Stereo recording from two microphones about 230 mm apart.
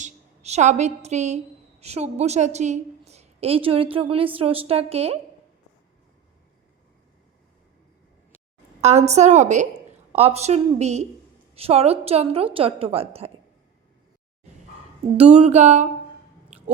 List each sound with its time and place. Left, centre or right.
0.0 s a woman's voice: right
8.8 s a woman's voice: right
15.2 s a woman's voice: right